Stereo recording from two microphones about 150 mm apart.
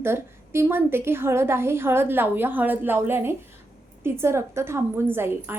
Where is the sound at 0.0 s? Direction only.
15° right (ahead or behind).